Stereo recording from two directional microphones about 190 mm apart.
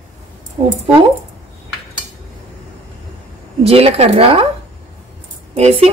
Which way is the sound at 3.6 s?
30° right (ahead or behind).